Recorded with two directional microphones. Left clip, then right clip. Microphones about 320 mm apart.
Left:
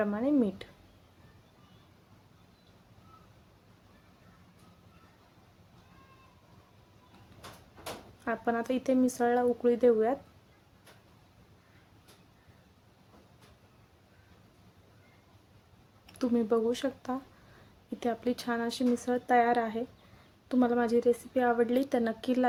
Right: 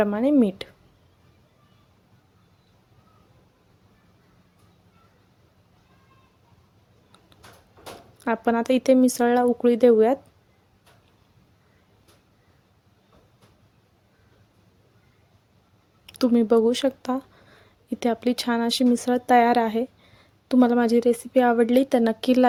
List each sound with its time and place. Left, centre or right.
0.0 s speech: right
8.2 s speech: right
16.0 s speech: right